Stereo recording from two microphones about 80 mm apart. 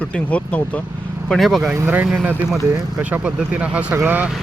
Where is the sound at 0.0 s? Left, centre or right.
Centre.